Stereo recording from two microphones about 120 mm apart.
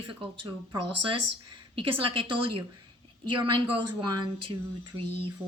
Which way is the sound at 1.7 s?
45° right (ahead or behind).